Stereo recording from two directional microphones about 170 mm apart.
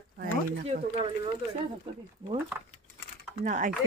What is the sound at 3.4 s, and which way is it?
Speech, 50° right (ahead or behind).